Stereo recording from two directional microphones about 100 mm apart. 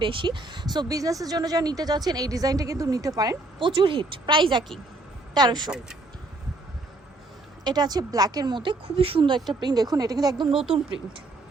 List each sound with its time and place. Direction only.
0.0 s speech: 55° right (ahead or behind); by 3.3 s 35° right (ahead or behind)
3.6 s speech: 55° right (ahead or behind)
7.6 s speech: 45° right (ahead or behind)
9.0 s speech: 65° right (ahead or behind); by 10.6 s 45° right (ahead or behind)